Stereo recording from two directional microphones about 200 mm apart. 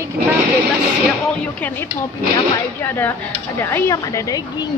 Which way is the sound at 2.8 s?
10° left (ahead or behind).